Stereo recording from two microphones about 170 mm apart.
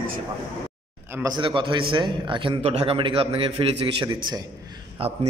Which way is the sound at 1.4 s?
30° right (ahead or behind).